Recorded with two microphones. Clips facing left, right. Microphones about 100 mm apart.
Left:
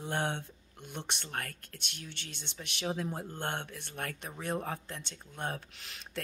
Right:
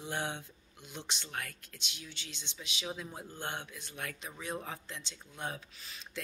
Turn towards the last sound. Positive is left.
turn(degrees=80)